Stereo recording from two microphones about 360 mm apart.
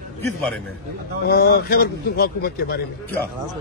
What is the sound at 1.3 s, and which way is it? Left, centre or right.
A man's voice, left.